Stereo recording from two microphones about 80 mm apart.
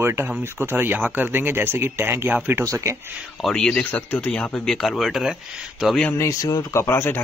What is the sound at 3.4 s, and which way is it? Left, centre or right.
Speech, centre.